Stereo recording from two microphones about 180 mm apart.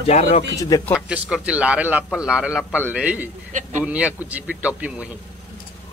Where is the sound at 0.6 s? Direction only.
20° left (ahead or behind).